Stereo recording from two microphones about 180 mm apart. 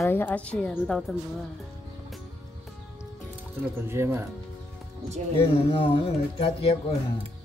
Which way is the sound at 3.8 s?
15° right (ahead or behind).